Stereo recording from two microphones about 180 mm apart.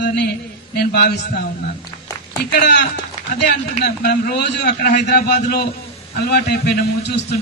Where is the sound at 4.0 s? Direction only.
60° left (ahead or behind).